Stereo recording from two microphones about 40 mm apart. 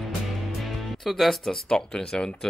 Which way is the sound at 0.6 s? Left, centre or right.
Centre.